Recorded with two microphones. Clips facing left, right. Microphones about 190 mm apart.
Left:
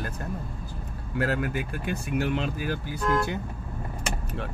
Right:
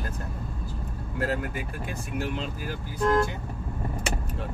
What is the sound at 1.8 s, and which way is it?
Speech, 65° left (ahead or behind).